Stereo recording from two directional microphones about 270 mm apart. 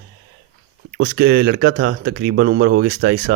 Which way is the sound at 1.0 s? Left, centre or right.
Right.